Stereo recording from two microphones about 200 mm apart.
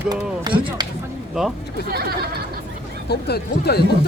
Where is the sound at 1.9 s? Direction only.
50° right (ahead or behind).